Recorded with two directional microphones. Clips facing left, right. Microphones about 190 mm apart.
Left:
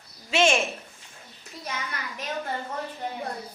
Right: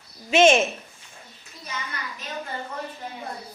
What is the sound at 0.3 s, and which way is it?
Speech, 20° right (ahead or behind).